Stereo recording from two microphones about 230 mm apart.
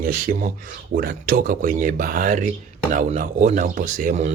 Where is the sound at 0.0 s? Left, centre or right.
Right.